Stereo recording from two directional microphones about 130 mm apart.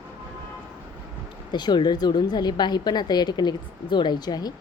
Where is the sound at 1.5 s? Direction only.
35° left (ahead or behind).